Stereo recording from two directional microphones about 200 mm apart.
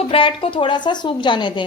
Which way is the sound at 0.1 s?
25° left (ahead or behind).